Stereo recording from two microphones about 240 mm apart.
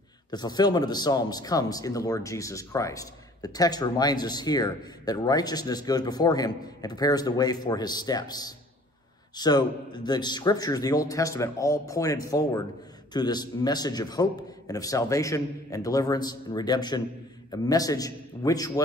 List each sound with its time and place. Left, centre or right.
0.3 s speech: centre